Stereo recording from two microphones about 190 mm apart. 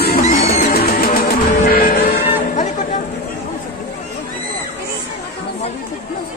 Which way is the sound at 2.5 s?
40° left (ahead or behind).